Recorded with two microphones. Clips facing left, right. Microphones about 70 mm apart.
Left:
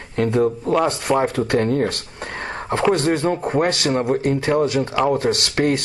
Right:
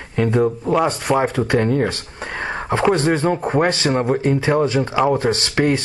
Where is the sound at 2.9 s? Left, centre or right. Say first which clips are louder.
Right 1 dB; right.